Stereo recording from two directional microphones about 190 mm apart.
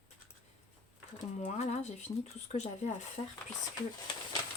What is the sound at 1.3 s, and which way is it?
Speech, 35° left (ahead or behind).